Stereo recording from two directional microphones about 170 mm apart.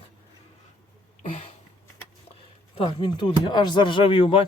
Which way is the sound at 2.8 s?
30° left (ahead or behind).